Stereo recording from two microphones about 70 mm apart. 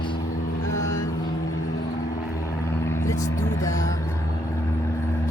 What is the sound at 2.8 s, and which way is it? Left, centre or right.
Vehicle, left.